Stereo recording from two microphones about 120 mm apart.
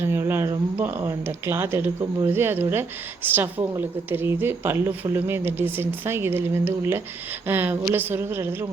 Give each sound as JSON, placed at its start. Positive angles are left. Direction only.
{"t": 0.0, "sound": "a woman's voice", "side_deg": -20}